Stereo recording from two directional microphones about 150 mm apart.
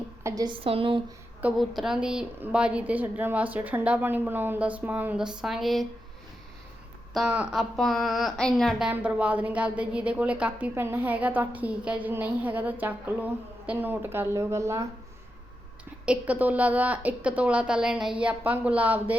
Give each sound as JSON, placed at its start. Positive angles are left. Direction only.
{"t": 0.2, "sound": "a sound", "side_deg": -20}
{"t": 0.4, "sound": "a woman's voice", "side_deg": -35}
{"t": 1.4, "sound": "a woman's voice", "side_deg": -5}
{"t": 7.1, "sound": "a woman's voice", "side_deg": -5}
{"t": 16.0, "sound": "a woman's voice", "side_deg": -10}